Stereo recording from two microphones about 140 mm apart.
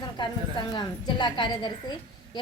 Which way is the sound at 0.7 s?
30° left (ahead or behind).